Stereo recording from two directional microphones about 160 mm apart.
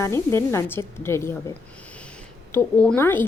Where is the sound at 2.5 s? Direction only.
10° left (ahead or behind).